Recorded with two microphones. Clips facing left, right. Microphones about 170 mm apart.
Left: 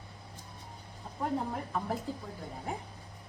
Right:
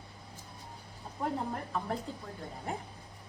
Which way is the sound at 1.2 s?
5° left (ahead or behind).